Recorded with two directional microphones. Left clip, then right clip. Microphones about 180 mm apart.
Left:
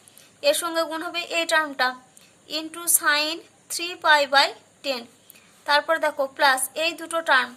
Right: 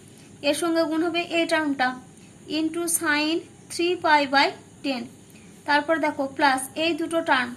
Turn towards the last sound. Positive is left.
turn(degrees=45)  # may be behind; listen again after turning